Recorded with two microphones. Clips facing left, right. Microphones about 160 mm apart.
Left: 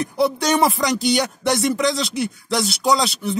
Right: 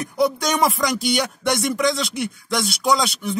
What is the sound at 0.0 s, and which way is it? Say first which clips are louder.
Speech: left 1 dB; 30° left (ahead or behind).